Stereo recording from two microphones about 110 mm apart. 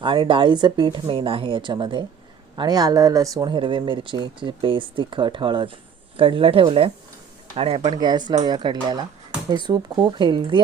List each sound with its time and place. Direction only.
0.0 s speech: 50° right (ahead or behind)
1.0 s speech: 55° right (ahead or behind)
7.9 s speech: 40° right (ahead or behind)